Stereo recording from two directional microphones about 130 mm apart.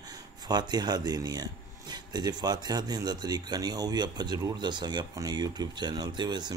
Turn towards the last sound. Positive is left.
turn(degrees=-35)  # may be behind; listen again after turning